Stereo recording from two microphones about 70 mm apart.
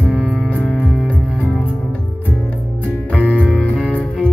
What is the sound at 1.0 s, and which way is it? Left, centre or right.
Music, centre.